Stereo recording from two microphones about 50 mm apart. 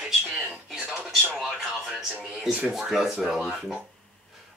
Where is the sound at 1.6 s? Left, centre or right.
Centre.